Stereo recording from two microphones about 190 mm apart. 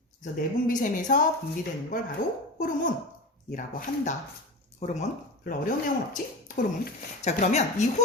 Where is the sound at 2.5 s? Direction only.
45° left (ahead or behind).